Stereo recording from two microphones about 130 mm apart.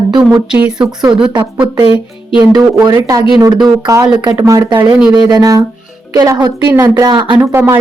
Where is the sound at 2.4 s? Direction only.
30° right (ahead or behind).